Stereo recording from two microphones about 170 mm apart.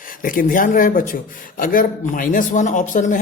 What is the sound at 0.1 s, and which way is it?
A man's voice, 55° left (ahead or behind).